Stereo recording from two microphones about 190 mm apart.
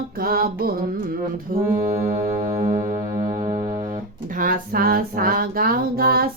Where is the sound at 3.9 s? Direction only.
45° right (ahead or behind).